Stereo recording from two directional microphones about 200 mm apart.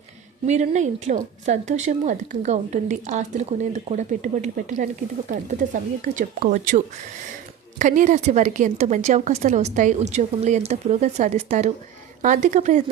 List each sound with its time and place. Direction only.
0.4 s a woman's voice: 35° right (ahead or behind)